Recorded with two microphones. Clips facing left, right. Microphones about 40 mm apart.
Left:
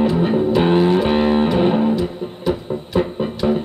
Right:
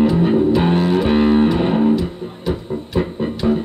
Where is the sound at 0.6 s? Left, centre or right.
Centre.